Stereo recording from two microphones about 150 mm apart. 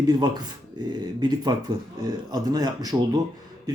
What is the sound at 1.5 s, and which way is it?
Speech, 30° right (ahead or behind).